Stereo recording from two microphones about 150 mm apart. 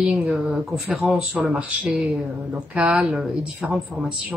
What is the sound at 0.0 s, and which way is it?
A woman's voice, 5° right (ahead or behind).